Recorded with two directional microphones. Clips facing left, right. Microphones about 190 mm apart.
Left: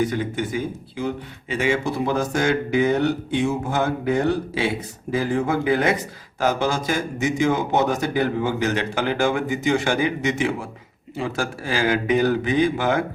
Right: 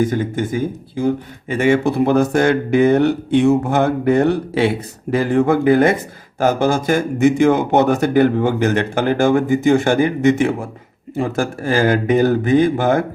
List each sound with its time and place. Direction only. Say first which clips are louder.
0.0 s a man's voice: right 5 dB; 45° right (ahead or behind)